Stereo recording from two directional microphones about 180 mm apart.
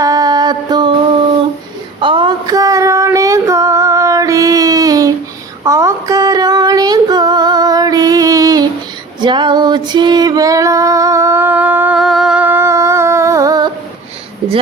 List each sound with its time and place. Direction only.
0.0 s music: 20° right (ahead or behind)
2.0 s female singing: 25° right (ahead or behind)